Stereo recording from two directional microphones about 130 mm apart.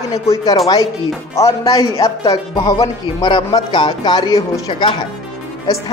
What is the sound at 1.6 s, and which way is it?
Speech, 45° left (ahead or behind).